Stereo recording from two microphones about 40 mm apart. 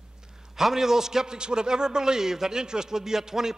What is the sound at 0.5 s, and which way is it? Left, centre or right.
A man's voice, centre.